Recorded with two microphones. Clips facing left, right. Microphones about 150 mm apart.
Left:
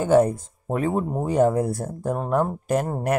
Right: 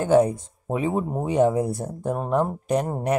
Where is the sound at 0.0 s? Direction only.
Centre (ahead or behind).